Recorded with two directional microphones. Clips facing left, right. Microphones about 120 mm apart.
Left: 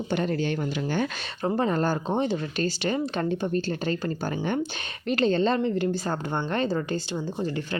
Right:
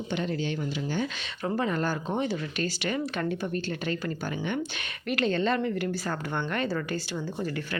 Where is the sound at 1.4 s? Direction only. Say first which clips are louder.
Left 4 dB; 35° left (ahead or behind).